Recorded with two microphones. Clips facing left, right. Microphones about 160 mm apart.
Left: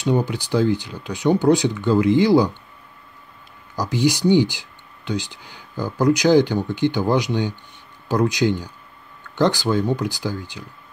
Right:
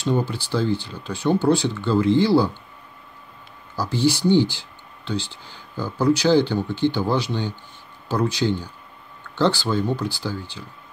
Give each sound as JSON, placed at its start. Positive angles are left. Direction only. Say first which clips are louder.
{"t": 0.0, "sound": "speech", "louder": "left 2 dB", "side_deg": 15}
{"t": 3.7, "sound": "speech", "louder": "left 1 dB", "side_deg": 15}